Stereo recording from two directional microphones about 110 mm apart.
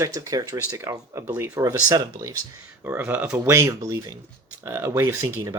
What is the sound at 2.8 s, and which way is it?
Speech, 20° right (ahead or behind).